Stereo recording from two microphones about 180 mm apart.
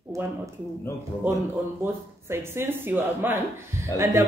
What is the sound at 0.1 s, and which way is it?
Speech, 15° right (ahead or behind).